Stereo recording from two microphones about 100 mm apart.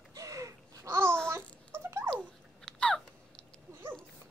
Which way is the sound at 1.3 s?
25° right (ahead or behind).